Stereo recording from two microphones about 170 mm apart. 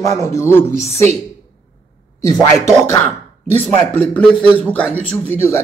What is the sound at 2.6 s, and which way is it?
Speech, 15° left (ahead or behind).